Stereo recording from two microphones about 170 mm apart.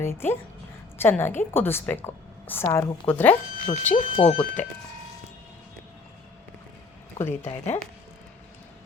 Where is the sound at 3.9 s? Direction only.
40° left (ahead or behind).